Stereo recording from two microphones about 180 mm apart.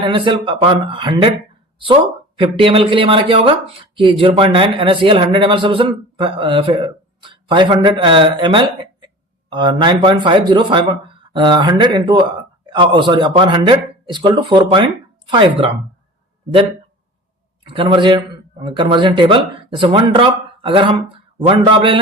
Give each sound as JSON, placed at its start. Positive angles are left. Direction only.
{"t": 0.0, "sound": "speech", "side_deg": -25}
{"t": 17.7, "sound": "speech", "side_deg": -25}